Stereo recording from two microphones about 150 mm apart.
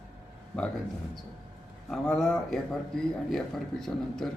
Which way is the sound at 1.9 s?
5° left (ahead or behind).